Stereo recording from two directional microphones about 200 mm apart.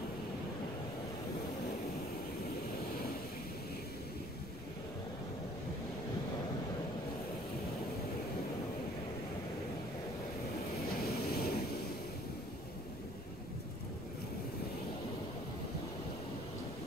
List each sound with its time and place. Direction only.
11.0 s vehicle: 50° left (ahead or behind)